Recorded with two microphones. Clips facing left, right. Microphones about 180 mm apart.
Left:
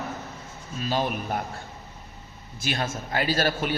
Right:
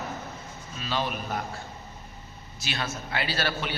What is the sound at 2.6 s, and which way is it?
A man's voice, 45° left (ahead or behind).